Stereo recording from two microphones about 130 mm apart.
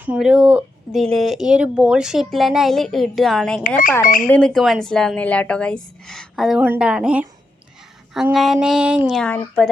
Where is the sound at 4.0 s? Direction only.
90° left.